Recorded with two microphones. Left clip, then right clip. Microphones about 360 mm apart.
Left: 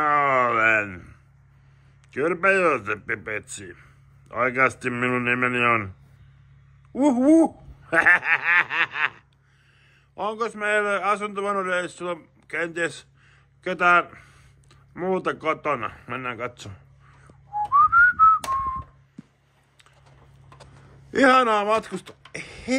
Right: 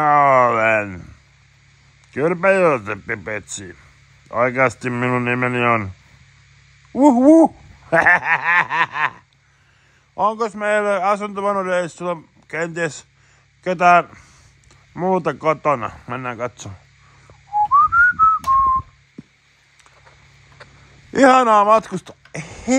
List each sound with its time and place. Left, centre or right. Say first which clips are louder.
0.0 s a sound: right 7 dB; centre
2.0 s a man's voice: right 5 dB; right
6.9 s a man's voice: right 7 dB; right
17.7 s whistling: right 2 dB; right
21.1 s speech: right 6 dB; centre